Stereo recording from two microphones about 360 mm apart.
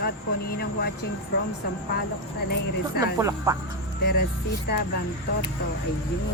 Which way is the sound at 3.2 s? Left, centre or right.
Centre.